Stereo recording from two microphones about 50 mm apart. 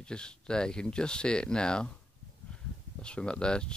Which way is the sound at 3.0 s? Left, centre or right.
Centre.